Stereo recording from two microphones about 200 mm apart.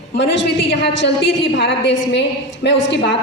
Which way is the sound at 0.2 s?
65° left (ahead or behind).